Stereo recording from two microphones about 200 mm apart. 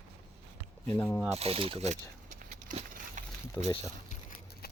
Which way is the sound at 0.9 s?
10° left (ahead or behind).